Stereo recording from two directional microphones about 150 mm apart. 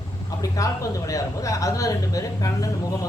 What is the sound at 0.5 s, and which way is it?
Speech, 20° left (ahead or behind).